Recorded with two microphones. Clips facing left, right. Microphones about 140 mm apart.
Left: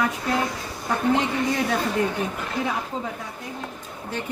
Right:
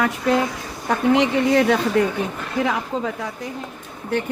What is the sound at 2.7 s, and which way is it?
Speech, 90° right.